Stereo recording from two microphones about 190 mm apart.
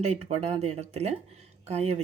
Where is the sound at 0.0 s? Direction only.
35° right (ahead or behind).